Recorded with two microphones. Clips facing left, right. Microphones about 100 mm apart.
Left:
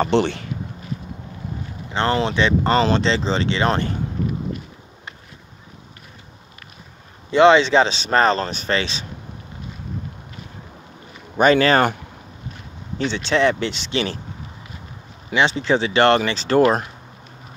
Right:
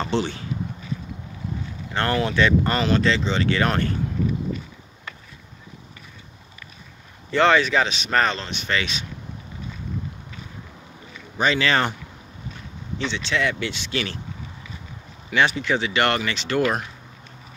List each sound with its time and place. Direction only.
0.0 s speech: 65° left (ahead or behind)
1.9 s speech: 20° left (ahead or behind)
7.2 s speech: 20° left (ahead or behind)
11.3 s speech: 50° left (ahead or behind)
12.9 s speech: 40° left (ahead or behind)
15.3 s speech: 30° left (ahead or behind)